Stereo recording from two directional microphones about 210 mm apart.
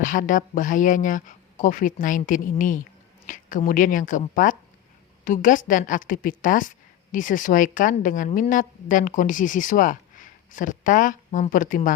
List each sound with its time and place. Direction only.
0.0 s a woman's voice: 40° left (ahead or behind)